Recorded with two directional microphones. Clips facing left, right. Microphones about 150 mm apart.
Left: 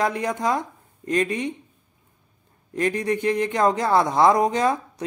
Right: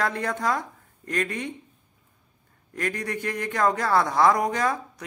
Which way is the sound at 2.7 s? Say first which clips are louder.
Left 7 dB; 20° left (ahead or behind).